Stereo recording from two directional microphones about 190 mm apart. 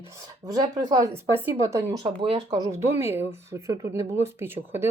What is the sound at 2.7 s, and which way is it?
Speech, 15° right (ahead or behind).